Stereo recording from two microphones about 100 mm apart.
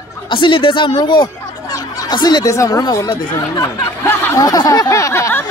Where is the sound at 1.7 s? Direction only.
45° left (ahead or behind).